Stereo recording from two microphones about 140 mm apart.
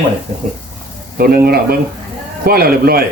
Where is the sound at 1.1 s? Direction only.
90° right.